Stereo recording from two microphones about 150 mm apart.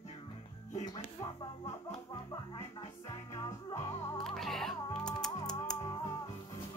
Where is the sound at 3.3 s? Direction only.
25° left (ahead or behind).